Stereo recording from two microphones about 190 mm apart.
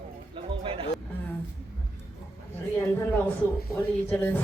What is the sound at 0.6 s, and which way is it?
Music, 30° right (ahead or behind).